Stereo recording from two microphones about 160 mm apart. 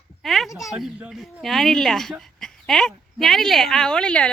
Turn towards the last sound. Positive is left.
turn(degrees=5)  # may be behind; listen again after turning